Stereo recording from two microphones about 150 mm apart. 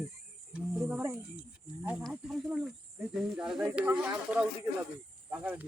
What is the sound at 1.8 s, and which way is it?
Speech, 10° right (ahead or behind).